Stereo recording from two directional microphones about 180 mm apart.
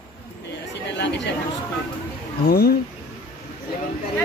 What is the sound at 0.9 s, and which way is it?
Speech, 75° left (ahead or behind).